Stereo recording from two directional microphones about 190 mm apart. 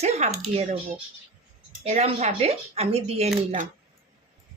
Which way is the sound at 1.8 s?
35° right (ahead or behind).